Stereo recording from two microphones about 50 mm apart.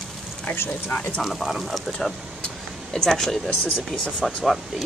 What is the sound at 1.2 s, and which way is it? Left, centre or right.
Speech, centre.